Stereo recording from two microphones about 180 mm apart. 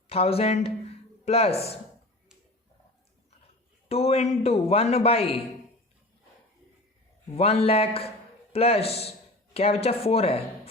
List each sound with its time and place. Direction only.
0.1 s speech: 35° left (ahead or behind)
3.8 s a man's voice: 35° left (ahead or behind)
7.3 s a man's voice: 35° left (ahead or behind)